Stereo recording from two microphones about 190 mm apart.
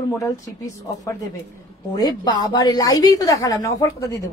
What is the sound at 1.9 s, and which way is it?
A woman's voice, 20° left (ahead or behind).